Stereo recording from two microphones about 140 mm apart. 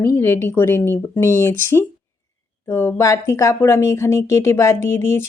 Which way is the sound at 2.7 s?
15° left (ahead or behind).